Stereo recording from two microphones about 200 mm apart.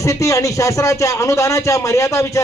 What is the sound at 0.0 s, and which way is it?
A man's voice, 15° left (ahead or behind).